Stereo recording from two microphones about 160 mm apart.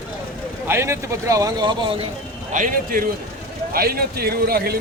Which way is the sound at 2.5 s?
60° right (ahead or behind).